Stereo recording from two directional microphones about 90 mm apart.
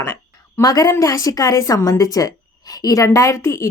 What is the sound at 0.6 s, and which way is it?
A woman's voice, 45° left (ahead or behind).